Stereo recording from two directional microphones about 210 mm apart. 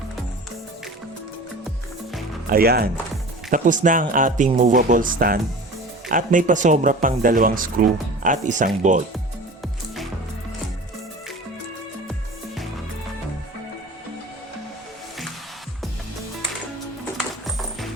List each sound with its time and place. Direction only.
2.5 s speech: 45° right (ahead or behind)
17.2 s music: centre (ahead or behind)